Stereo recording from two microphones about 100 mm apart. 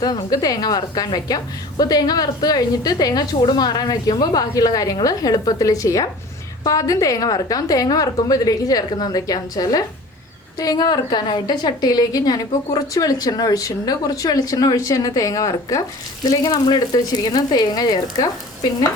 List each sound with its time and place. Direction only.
0.0 s a woman's voice: 45° left (ahead or behind)